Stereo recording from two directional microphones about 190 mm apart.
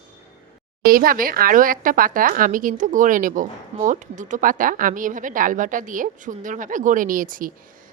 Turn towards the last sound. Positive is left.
turn(degrees=-45)  # may be behind; listen again after turning